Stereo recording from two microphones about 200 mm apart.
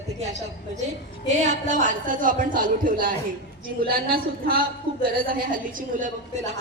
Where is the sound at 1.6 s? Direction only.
40° right (ahead or behind).